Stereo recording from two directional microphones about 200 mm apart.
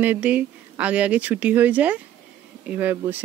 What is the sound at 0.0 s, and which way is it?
Speech, 10° right (ahead or behind).